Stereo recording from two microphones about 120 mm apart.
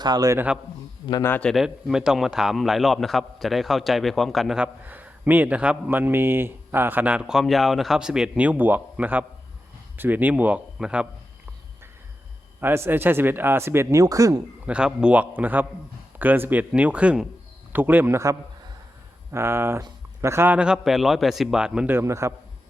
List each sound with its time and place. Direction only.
0.0 s a man's voice: 35° right (ahead or behind)
0.3 s speech: 10° right (ahead or behind)
1.2 s a man's voice: 15° left (ahead or behind)
1.5 s a man's voice: 5° right (ahead or behind)
12.5 s a man's voice: 20° right (ahead or behind)
14.7 s a man's voice: 10° right (ahead or behind)
21.9 s a man's voice: 25° right (ahead or behind)